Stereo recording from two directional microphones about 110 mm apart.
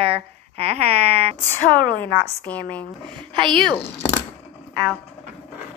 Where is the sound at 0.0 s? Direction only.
60° right (ahead or behind).